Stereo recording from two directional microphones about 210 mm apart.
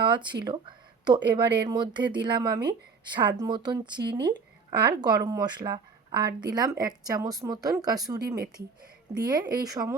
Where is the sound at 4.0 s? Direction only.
50° right (ahead or behind).